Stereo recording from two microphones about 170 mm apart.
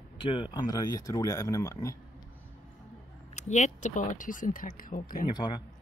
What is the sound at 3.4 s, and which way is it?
Speech, 45° left (ahead or behind).